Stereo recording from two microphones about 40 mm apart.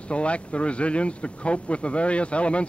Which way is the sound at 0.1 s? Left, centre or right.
Left.